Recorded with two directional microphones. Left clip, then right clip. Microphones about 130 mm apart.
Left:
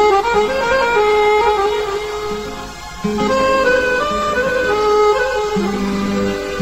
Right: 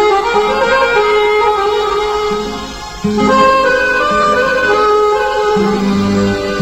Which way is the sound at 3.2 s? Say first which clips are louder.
Right 6 dB; 35° right (ahead or behind).